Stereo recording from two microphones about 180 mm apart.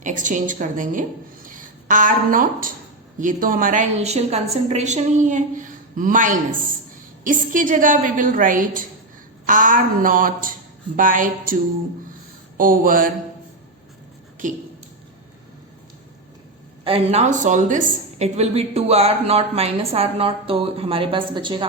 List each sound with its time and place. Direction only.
0.0 s a woman's voice: 45° right (ahead or behind)
12.5 s a woman's voice: 50° right (ahead or behind)
14.4 s a woman's voice: 45° right (ahead or behind)
16.8 s a woman's voice: 35° right (ahead or behind)